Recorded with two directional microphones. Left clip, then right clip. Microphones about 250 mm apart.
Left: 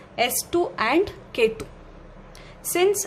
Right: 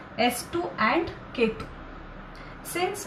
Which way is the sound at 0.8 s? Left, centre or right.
Left.